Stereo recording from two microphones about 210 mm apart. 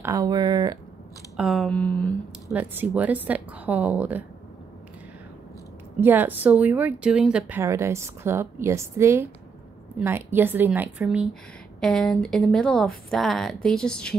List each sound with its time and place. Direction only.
0.0 s speech: 15° right (ahead or behind)
1.3 s speech: centre (ahead or behind)
2.5 s speech: 10° right (ahead or behind)
5.9 s speech: 10° right (ahead or behind)